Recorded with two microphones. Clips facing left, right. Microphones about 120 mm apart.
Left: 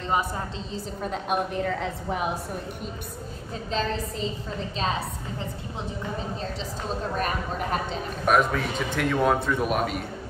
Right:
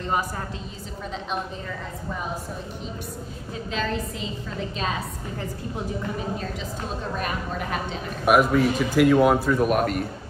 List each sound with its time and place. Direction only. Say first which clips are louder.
0.0 s a woman's voice: even; 20° left (ahead or behind)
1.1 s a woman's voice: left 4 dB; 60° left (ahead or behind)
3.7 s speech: left 1 dB; 35° left (ahead or behind)
7.2 s speech: even; 40° left (ahead or behind)
8.3 s a man's voice: right 4 dB; 5° right (ahead or behind)